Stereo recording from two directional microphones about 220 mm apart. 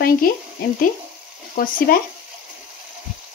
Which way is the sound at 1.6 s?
40° left (ahead or behind).